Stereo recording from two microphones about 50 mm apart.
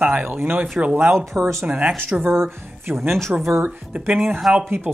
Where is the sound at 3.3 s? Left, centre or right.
Right.